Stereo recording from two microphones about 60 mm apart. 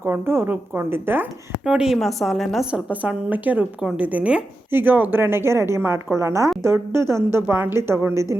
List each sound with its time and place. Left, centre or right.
0.0 s a woman's voice: right
1.6 s a woman's voice: centre
2.0 s a woman's voice: centre
2.7 s a woman's voice: right
4.7 s a woman's voice: right
7.4 s a woman's voice: right
7.8 s a woman's voice: right